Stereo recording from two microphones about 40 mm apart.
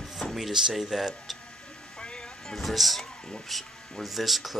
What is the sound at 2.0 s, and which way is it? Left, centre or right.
Vehicle, left.